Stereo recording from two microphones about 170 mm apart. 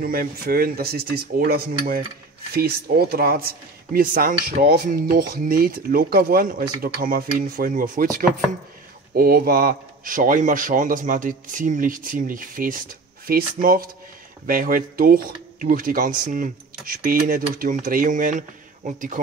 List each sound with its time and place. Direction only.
0.0 s a man's voice: 60° right (ahead or behind)